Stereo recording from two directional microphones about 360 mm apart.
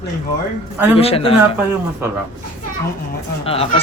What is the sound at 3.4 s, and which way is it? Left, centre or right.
Speech, centre.